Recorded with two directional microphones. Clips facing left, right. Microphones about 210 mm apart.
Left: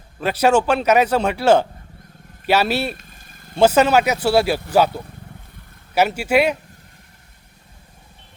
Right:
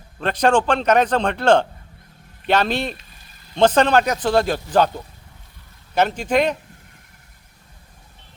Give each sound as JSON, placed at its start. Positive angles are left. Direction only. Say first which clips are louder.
{"t": 0.2, "sound": "a man's voice", "louder": "left 1 dB", "side_deg": 5}
{"t": 2.9, "sound": "vehicle", "louder": "left 2 dB", "side_deg": 50}
{"t": 3.5, "sound": "a man's voice", "louder": "left 1 dB", "side_deg": 10}
{"t": 5.9, "sound": "a man's voice", "louder": "left 2 dB", "side_deg": 10}